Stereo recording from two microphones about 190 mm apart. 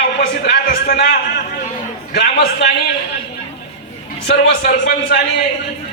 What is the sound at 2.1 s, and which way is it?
Speech, 65° left (ahead or behind).